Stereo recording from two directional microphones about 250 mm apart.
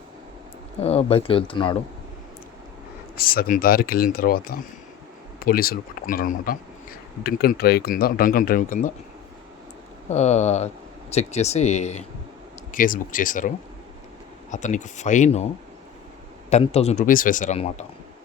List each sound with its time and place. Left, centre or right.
0.8 s speech: left
3.2 s speech: left
10.1 s speech: left
14.5 s speech: left
16.5 s speech: left